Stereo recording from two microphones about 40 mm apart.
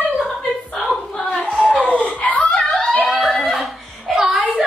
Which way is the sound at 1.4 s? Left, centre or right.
Right.